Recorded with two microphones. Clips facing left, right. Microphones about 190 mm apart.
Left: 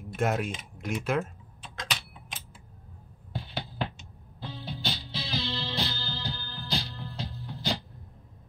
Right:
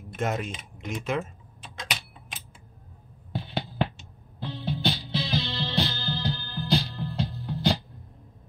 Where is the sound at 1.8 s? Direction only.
10° right (ahead or behind).